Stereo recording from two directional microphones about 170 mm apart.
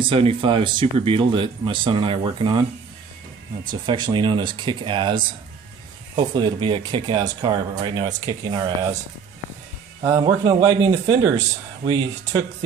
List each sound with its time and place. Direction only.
0.0 s speech: 30° right (ahead or behind)
3.7 s speech: 25° right (ahead or behind)
10.2 s speech: 25° right (ahead or behind)